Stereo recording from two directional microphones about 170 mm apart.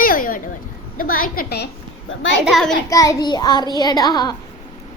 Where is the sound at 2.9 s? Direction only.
20° left (ahead or behind).